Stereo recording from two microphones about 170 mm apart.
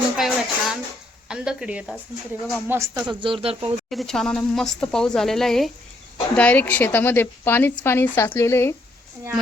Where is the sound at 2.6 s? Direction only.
15° right (ahead or behind).